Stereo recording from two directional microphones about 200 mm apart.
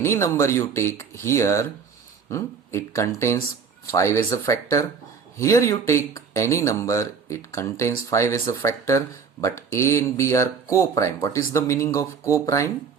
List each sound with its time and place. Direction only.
0.0 s speech: 15° left (ahead or behind)